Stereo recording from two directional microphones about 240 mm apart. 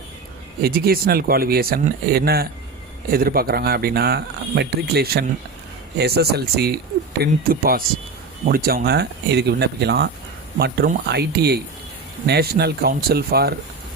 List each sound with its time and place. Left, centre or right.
0.6 s speech: right